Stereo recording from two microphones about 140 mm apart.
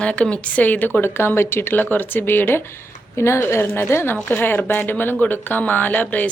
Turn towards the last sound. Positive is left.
turn(degrees=10)  # may be behind; listen again after turning